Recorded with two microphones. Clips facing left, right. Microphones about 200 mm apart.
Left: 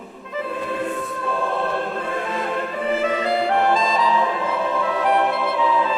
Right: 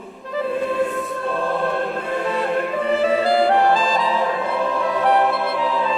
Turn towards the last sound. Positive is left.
turn(degrees=-30)  # may be behind; listen again after turning